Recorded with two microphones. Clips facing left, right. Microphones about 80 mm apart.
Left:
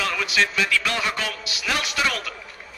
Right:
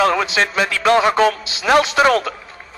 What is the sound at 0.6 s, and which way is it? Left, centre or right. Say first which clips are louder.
A man's voice: right 9 dB; right.